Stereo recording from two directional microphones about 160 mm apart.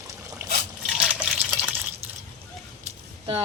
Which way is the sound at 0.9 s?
5° right (ahead or behind).